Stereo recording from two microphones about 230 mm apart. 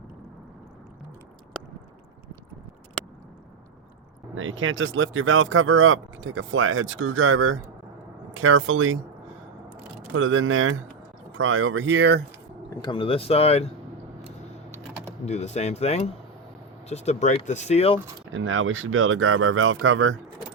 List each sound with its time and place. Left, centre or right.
4.4 s speech: right
10.1 s speech: right
12.8 s speech: left
15.3 s speech: left
18.3 s speech: right